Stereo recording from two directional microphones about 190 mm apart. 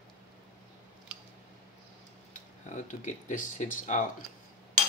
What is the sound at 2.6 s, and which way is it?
Speech, 40° left (ahead or behind).